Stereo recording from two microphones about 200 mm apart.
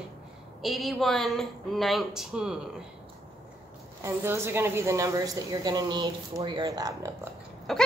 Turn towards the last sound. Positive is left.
turn(degrees=0)  # may be behind; listen again after turning